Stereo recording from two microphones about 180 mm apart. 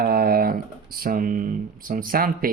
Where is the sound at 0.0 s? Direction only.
60° right (ahead or behind).